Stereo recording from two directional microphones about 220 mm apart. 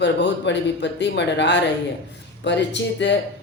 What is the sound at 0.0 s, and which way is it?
Speech, 50° left (ahead or behind).